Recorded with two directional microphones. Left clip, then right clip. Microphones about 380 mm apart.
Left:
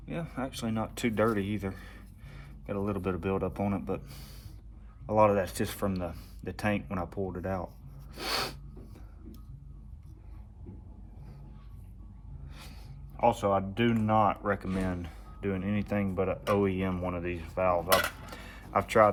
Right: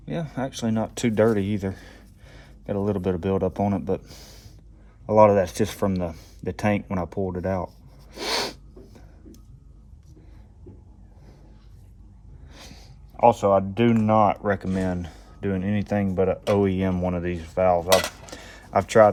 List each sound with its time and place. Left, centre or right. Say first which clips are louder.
0.0 s speech: right 7 dB; right
8.1 s rub: right 6 dB; right
12.5 s speech: right 6 dB; right